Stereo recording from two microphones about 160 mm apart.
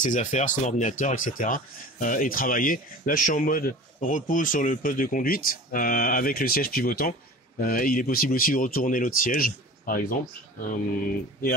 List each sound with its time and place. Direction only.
0.0 s speech: 50° left (ahead or behind)